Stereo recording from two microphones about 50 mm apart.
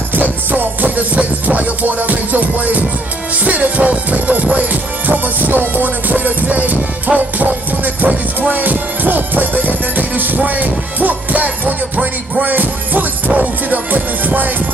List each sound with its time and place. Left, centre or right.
0.1 s music: right